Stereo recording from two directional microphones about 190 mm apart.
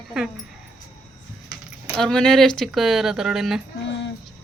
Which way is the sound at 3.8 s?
65° left (ahead or behind).